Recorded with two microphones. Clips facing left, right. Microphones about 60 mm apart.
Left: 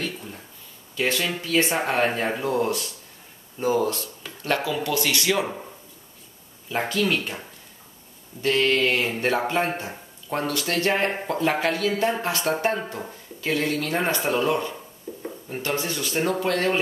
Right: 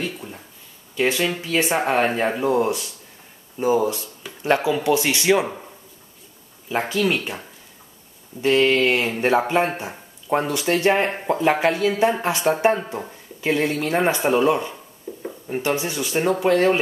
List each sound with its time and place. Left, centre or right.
0.0 s a sound: centre
0.9 s speech: centre
4.4 s speech: centre
6.7 s speech: centre
8.4 s speech: centre